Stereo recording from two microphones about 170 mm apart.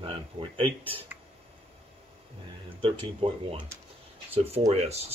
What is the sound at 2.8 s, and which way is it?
Speech, 30° right (ahead or behind).